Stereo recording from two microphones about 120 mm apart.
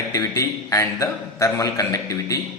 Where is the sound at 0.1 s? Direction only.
30° left (ahead or behind).